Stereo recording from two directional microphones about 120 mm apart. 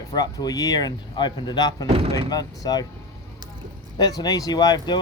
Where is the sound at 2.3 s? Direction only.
35° left (ahead or behind).